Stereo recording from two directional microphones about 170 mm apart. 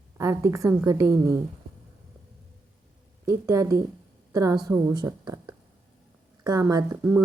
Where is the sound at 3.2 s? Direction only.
15° right (ahead or behind).